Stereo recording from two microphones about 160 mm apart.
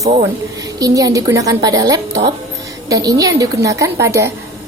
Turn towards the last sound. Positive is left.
turn(degrees=-20)  # may be behind; listen again after turning